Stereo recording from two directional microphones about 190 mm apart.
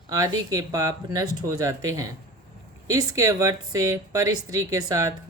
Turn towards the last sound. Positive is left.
turn(degrees=-15)  # may be behind; listen again after turning